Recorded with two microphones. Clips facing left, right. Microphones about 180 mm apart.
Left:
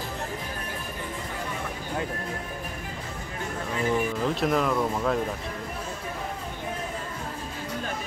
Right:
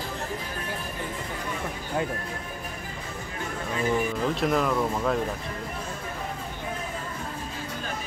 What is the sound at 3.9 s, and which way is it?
Speech, centre (ahead or behind).